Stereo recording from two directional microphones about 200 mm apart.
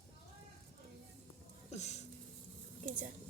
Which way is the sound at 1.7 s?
35° left (ahead or behind).